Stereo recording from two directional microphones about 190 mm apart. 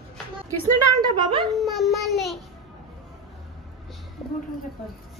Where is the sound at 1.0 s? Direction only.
25° right (ahead or behind).